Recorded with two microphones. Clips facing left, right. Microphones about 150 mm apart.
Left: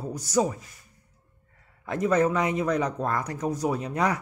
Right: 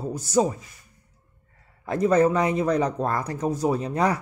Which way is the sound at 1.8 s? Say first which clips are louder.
Right 4 dB; 35° right (ahead or behind).